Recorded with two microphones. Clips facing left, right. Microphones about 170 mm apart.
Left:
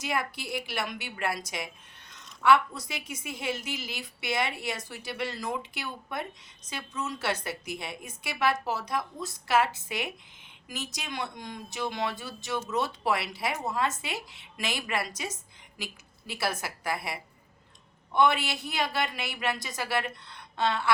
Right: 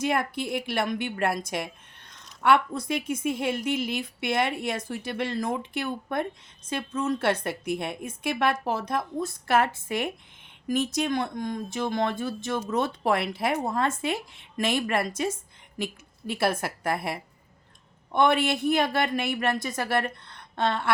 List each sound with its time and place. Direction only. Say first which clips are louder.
0.0 s a woman's voice: right 6 dB; 55° right (ahead or behind)
16.4 s speech: right 6 dB; 55° right (ahead or behind)